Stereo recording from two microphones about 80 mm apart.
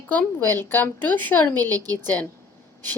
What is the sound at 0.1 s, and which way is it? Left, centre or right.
Speech, left.